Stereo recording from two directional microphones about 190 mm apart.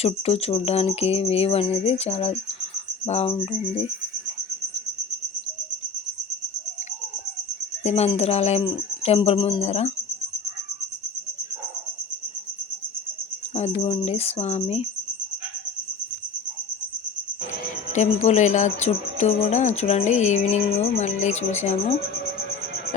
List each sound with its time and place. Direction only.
0.0 s speech: 30° left (ahead or behind)
7.9 s speech: 35° left (ahead or behind)
13.5 s speech: 35° left (ahead or behind)
17.9 s speech: 40° left (ahead or behind)